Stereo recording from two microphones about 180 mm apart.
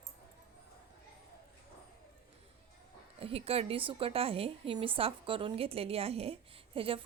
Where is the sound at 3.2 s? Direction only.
35° right (ahead or behind).